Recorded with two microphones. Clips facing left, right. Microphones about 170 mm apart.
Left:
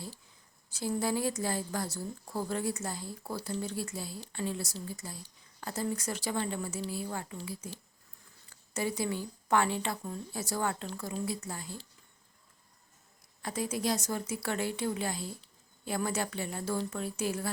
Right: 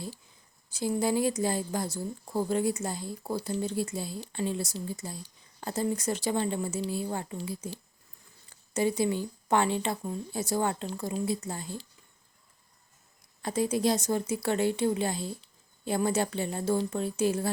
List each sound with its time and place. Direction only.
0.7 s a woman's voice: 15° right (ahead or behind)
13.4 s a woman's voice: 25° right (ahead or behind)